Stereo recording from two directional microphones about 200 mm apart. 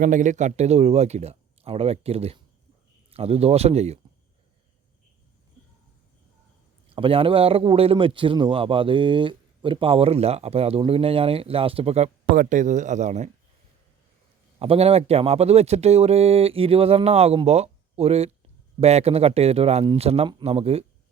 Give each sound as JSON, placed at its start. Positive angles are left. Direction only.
{"t": 0.0, "sound": "speech", "side_deg": -40}
{"t": 6.9, "sound": "a man's voice", "side_deg": -25}
{"t": 14.6, "sound": "speech", "side_deg": -30}